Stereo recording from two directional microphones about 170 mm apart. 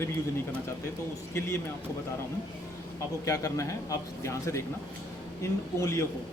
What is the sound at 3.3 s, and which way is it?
A man's voice, 20° left (ahead or behind).